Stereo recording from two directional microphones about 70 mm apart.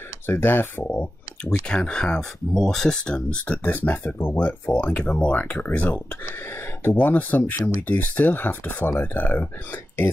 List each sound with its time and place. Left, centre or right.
0.3 s speech: left
0.9 s speech: centre